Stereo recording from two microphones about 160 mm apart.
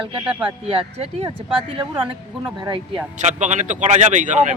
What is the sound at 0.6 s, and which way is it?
Speech, 35° right (ahead or behind).